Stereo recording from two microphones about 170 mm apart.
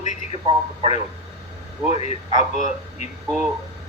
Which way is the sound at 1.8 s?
40° left (ahead or behind).